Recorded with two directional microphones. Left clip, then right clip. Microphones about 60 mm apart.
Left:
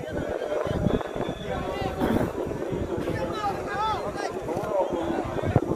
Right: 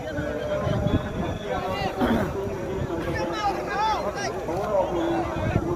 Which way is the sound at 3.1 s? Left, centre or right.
Centre.